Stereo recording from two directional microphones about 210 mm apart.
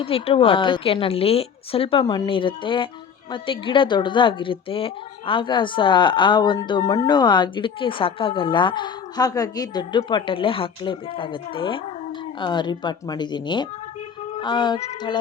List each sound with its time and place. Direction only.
0.0 s a woman's voice: 25° left (ahead or behind)